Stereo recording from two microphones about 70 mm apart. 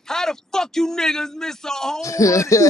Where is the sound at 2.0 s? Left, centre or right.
Left.